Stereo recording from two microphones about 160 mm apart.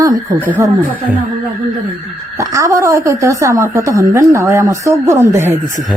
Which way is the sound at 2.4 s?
20° right (ahead or behind).